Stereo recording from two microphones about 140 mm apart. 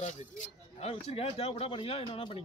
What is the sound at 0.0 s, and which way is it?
Speech, 60° left (ahead or behind).